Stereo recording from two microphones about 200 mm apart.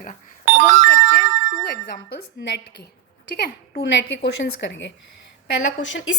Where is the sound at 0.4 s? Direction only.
35° right (ahead or behind).